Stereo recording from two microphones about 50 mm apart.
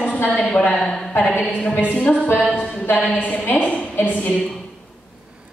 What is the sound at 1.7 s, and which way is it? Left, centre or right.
Speech, left.